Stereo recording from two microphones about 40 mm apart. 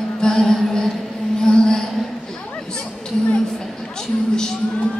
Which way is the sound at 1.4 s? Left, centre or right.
Centre.